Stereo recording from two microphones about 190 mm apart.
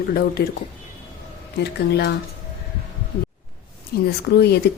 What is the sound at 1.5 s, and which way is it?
Speech, 60° left (ahead or behind).